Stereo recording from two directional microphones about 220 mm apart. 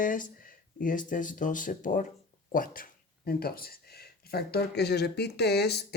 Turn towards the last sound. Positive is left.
turn(degrees=50)  # may be behind; listen again after turning